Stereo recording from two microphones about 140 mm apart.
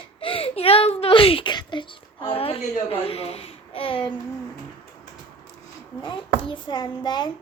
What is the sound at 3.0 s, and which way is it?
Speech, 45° left (ahead or behind).